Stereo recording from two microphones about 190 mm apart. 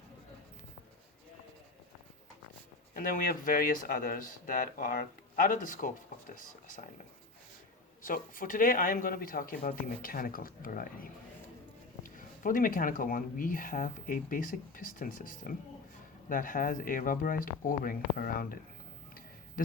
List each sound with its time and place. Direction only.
2.9 s speech: 45° left (ahead or behind)
8.0 s speech: 45° left (ahead or behind)